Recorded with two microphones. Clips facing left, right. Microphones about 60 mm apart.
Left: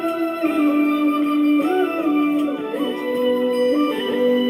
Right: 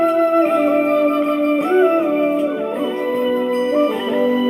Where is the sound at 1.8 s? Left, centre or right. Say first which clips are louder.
Right 6 dB; centre.